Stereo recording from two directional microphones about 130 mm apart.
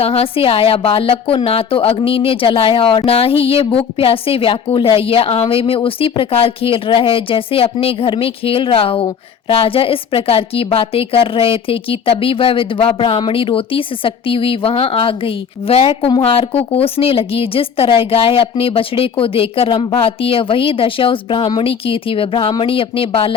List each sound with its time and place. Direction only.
0.0 s a woman's voice: 50° left (ahead or behind)